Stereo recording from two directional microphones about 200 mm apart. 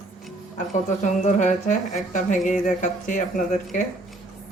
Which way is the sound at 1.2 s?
40° left (ahead or behind).